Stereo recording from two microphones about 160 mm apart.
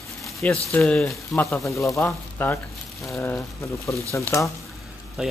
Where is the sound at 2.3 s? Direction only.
15° left (ahead or behind).